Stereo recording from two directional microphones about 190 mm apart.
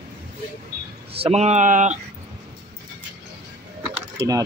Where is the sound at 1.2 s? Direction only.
35° right (ahead or behind).